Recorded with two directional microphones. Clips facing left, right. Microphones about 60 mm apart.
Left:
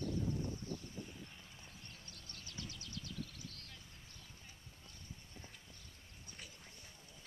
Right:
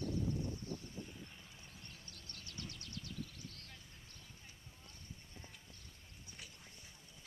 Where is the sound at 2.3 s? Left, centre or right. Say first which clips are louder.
Even; right.